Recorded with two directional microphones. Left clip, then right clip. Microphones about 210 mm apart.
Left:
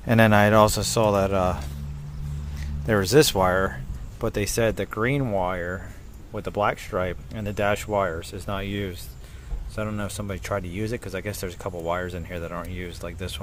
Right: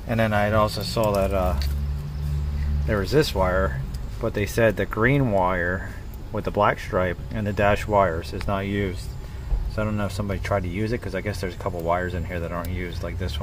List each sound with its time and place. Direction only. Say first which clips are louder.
0.0 s speech: left 4 dB; 50° left (ahead or behind)
2.9 s speech: left 3 dB; 40° left (ahead or behind); by 13.4 s 20° left (ahead or behind)